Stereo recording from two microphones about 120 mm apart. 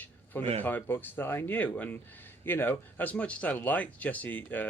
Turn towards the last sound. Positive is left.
turn(degrees=15)  # may be behind; listen again after turning